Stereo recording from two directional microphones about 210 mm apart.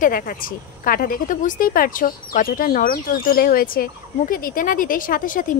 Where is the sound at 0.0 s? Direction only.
40° left (ahead or behind).